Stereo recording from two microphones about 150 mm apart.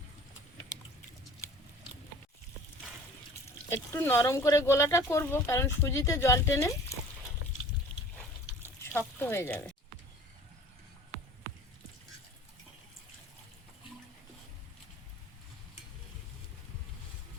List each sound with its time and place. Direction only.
3.7 s speech: 15° left (ahead or behind)
8.6 s speech: 15° left (ahead or behind)